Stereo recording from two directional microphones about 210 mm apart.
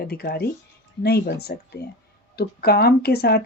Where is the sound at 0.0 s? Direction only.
45° left (ahead or behind).